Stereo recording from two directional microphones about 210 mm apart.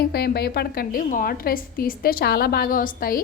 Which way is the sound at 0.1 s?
50° left (ahead or behind).